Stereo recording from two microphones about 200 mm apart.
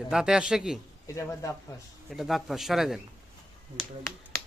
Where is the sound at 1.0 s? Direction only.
15° left (ahead or behind).